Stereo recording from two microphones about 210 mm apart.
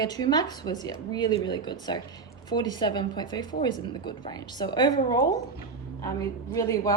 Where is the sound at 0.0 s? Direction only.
20° left (ahead or behind).